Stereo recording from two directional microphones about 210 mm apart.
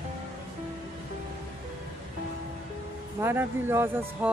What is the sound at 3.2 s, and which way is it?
Speech, 10° right (ahead or behind).